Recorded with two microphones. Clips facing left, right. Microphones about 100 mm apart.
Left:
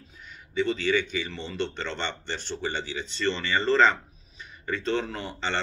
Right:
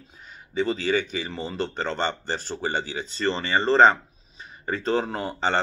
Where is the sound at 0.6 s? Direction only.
40° right (ahead or behind).